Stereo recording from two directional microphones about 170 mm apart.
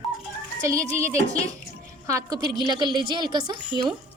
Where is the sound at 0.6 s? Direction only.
15° right (ahead or behind).